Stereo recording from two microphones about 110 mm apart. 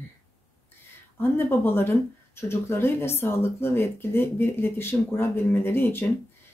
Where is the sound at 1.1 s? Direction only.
20° left (ahead or behind).